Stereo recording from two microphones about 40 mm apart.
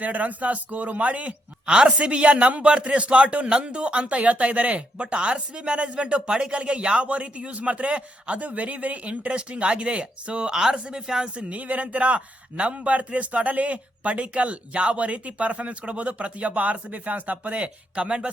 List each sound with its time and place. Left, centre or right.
0.0 s speech: right
1.6 s speech: right
11.5 s speech: right
17.6 s speech: right